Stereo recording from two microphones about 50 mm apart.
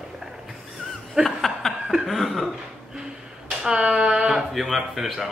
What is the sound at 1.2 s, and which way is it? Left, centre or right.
Laughter, centre.